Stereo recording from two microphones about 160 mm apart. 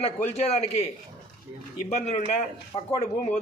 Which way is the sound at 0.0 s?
40° left (ahead or behind).